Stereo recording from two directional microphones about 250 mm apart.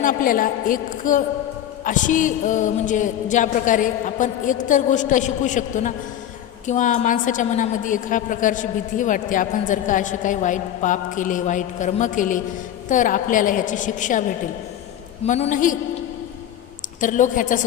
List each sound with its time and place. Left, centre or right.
0.0 s a woman's voice: left
17.0 s a woman's voice: left